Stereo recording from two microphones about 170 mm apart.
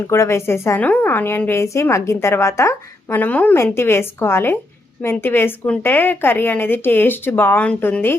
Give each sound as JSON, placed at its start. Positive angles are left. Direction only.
{"t": 0.1, "sound": "a woman's voice", "side_deg": 15}